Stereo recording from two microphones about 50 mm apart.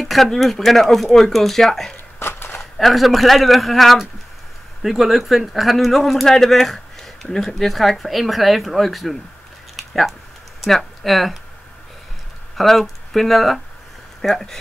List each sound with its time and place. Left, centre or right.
0.0 s speech: centre
2.1 s a sound: left
2.6 s speech: centre
9.8 s typing: centre
10.6 s speech: centre
12.5 s speech: centre